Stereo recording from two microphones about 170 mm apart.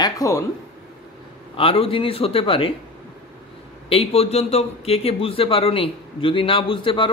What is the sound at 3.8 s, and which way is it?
A man's voice, 35° left (ahead or behind).